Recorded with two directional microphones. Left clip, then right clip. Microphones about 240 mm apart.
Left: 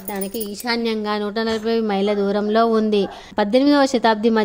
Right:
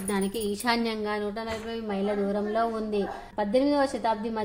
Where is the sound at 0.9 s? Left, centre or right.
Left.